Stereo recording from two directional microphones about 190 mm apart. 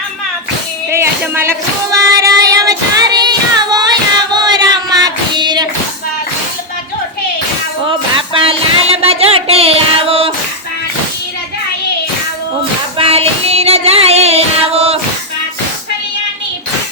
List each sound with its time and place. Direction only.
0.9 s music: 15° right (ahead or behind)
2.1 s child singing: 20° right (ahead or behind)
4.3 s female singing: 20° right (ahead or behind)
7.9 s a sound: 30° right (ahead or behind)
13.0 s music: 30° right (ahead or behind)